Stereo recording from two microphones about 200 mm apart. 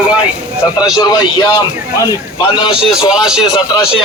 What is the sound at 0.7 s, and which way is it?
Speech, 20° left (ahead or behind).